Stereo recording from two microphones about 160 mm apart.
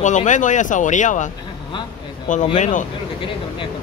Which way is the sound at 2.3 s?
50° left (ahead or behind).